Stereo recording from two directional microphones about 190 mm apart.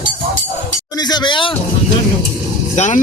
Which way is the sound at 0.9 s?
20° left (ahead or behind).